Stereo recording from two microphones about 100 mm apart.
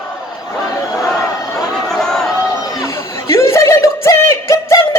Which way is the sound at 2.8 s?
30° left (ahead or behind).